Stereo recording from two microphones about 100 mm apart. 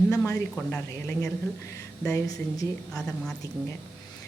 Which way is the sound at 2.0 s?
35° left (ahead or behind).